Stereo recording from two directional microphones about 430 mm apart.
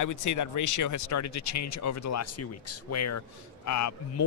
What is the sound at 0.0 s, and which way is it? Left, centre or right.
Speech, left.